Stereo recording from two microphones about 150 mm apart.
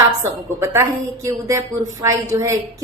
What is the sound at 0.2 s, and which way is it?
A woman's voice, 20° right (ahead or behind).